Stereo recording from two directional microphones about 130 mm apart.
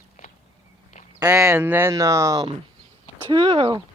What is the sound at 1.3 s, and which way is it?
Speech, 20° right (ahead or behind).